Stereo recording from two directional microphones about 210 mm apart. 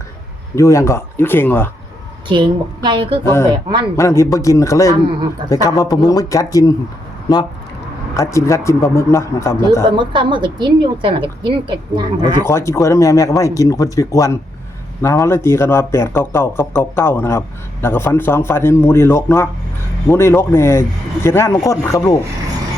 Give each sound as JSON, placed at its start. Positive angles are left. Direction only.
{"t": 0.5, "sound": "a man's voice", "side_deg": 15}
{"t": 2.2, "sound": "a woman's voice", "side_deg": -25}
{"t": 3.2, "sound": "a man's voice", "side_deg": 15}
{"t": 8.1, "sound": "a man's voice", "side_deg": 15}
{"t": 9.9, "sound": "a woman's voice", "side_deg": -20}
{"t": 12.5, "sound": "a man's voice", "side_deg": 10}